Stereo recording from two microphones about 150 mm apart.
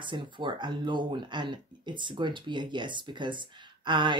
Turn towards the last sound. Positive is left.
turn(degrees=-30)  # may be behind; listen again after turning